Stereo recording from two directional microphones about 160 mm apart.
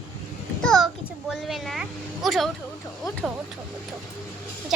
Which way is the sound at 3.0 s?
Centre (ahead or behind).